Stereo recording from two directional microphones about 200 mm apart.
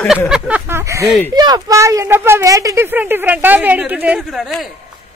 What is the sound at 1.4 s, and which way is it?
Speech, 20° right (ahead or behind).